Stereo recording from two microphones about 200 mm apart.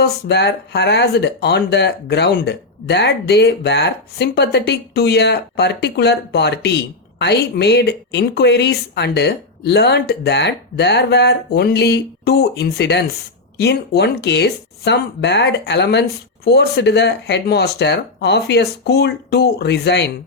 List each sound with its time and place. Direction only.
0.0 s speech: 55° left (ahead or behind)